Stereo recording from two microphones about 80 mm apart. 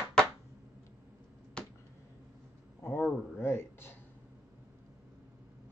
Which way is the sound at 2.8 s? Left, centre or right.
Left.